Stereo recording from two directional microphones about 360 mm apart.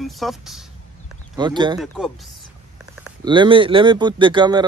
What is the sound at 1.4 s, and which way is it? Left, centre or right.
Speech, centre.